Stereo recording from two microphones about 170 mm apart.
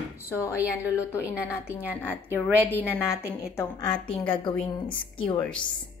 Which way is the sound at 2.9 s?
15° left (ahead or behind).